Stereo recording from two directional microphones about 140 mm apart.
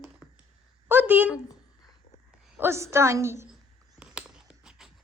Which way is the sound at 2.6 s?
20° right (ahead or behind).